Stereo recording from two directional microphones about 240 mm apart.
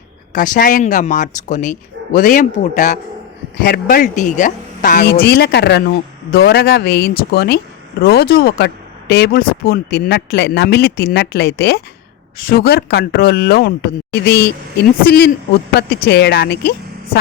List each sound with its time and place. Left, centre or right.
0.3 s speech: left